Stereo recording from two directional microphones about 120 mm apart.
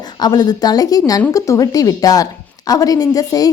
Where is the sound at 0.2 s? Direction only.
35° left (ahead or behind).